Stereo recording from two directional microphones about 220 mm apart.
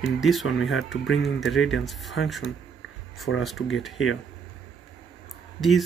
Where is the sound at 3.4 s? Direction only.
Centre (ahead or behind).